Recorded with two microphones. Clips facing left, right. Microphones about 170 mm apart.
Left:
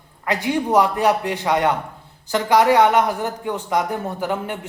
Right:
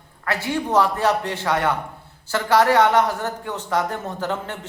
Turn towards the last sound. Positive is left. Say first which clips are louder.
# left 2 dB
turn(degrees=15)  # may be behind; listen again after turning